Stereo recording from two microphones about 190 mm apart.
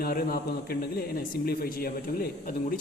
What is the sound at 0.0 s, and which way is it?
A man's voice, 50° left (ahead or behind).